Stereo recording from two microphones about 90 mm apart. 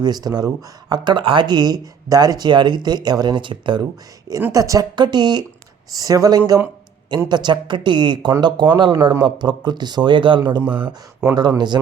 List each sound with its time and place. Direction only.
0.0 s speech: 45° right (ahead or behind); by 3.8 s 65° right (ahead or behind)
4.5 s speech: 40° right (ahead or behind)
4.9 s speech: 55° right (ahead or behind)
5.9 s speech: 40° right (ahead or behind)
7.3 s speech: 55° right (ahead or behind)
11.3 s speech: 50° right (ahead or behind)